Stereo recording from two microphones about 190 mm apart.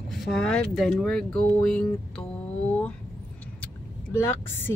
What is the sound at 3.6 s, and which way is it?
Vehicle, 10° left (ahead or behind).